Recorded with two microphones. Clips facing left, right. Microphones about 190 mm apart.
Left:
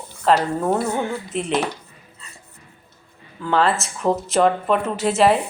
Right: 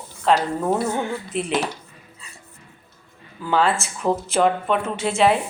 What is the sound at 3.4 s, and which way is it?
Speech, centre (ahead or behind).